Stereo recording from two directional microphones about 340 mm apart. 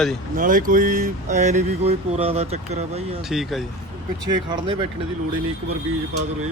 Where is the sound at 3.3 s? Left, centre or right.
Centre.